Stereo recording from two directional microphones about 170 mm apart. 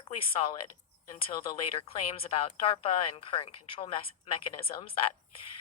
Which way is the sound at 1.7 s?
30° left (ahead or behind).